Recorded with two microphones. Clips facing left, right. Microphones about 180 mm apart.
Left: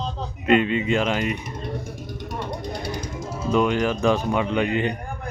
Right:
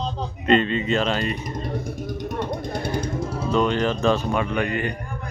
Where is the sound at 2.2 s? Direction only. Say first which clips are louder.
Right 2 dB; 45° right (ahead or behind).